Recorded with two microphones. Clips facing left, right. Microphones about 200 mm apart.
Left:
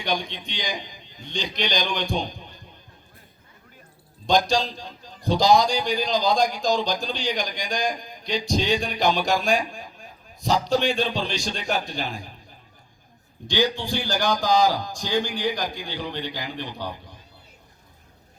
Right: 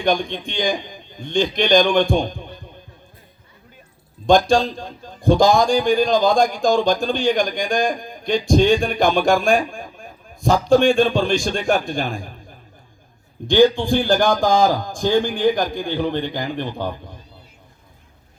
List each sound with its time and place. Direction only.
0.0 s a man's voice: 50° right (ahead or behind)
4.3 s a man's voice: 50° right (ahead or behind)